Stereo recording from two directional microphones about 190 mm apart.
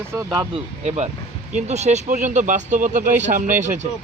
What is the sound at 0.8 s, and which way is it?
Speech, 35° right (ahead or behind).